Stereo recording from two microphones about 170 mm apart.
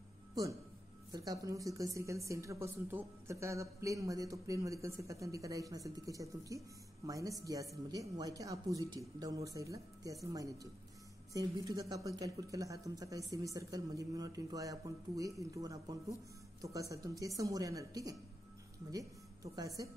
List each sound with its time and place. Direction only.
0.3 s music: 25° right (ahead or behind)
1.1 s a woman's voice: 20° right (ahead or behind)